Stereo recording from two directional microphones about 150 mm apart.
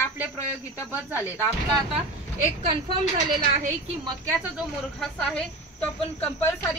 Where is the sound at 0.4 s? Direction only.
20° left (ahead or behind).